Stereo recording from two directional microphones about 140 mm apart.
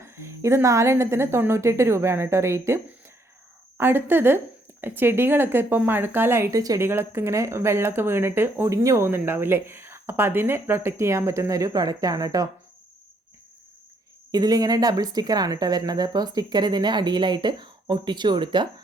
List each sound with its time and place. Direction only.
0.0 s speech: 20° right (ahead or behind)
14.3 s speech: 25° right (ahead or behind)